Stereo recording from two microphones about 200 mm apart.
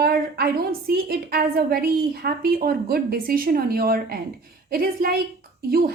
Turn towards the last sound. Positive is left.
turn(degrees=-50)  # may be behind; listen again after turning